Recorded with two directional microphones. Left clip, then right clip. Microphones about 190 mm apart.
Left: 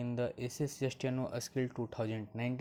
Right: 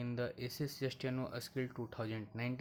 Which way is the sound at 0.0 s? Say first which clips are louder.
Left 4 dB; 10° left (ahead or behind).